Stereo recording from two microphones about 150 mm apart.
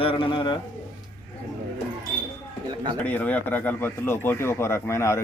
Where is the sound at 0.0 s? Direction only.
35° left (ahead or behind).